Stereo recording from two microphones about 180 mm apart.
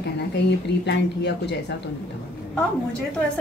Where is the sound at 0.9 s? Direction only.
70° left (ahead or behind).